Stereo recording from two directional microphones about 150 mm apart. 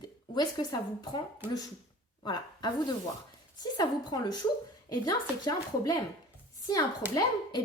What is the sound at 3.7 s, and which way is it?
Speech, 25° left (ahead or behind).